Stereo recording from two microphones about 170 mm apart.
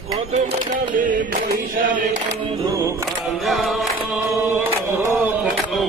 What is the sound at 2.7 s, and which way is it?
Music, 15° right (ahead or behind).